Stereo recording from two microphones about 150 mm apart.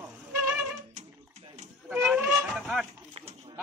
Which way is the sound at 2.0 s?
Centre (ahead or behind).